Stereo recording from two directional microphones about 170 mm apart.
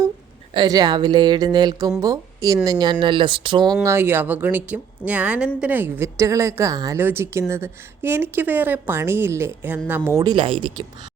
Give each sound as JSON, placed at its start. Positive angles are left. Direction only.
{"t": 0.5, "sound": "a woman's voice", "side_deg": -25}
{"t": 3.8, "sound": "a woman's voice", "side_deg": -15}
{"t": 10.2, "sound": "a woman's voice", "side_deg": -30}